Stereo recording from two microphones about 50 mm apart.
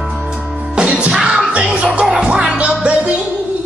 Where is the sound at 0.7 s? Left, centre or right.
Centre.